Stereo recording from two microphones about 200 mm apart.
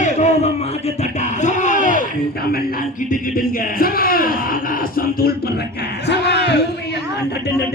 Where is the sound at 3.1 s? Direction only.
45° left (ahead or behind).